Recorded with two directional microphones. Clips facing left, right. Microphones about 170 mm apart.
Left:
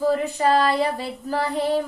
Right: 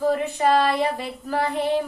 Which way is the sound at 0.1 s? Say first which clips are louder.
Even; 35° left (ahead or behind).